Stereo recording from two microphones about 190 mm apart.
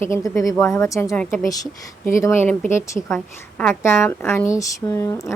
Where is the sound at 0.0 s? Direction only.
15° left (ahead or behind).